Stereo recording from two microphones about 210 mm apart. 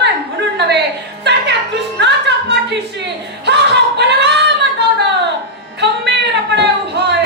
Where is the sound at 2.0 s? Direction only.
55° right (ahead or behind).